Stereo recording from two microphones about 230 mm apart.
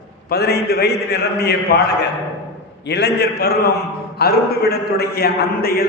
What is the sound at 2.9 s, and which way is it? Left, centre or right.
A man's voice, left.